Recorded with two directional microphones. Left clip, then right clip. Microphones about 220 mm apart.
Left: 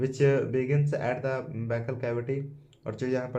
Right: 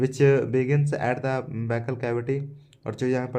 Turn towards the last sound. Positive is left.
turn(degrees=-40)  # may be behind; listen again after turning